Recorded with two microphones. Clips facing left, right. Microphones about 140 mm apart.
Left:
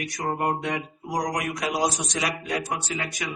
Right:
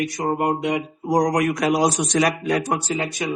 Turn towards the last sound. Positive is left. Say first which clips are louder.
# right 7 dB
turn(degrees=-30)  # may be behind; listen again after turning